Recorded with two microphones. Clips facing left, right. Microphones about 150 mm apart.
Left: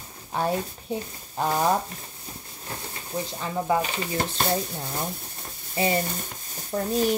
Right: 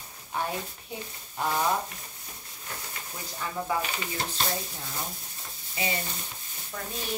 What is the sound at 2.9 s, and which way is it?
Speech, 25° left (ahead or behind).